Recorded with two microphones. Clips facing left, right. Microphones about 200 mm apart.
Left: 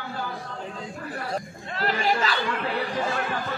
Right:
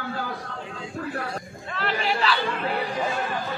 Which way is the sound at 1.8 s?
40° left (ahead or behind).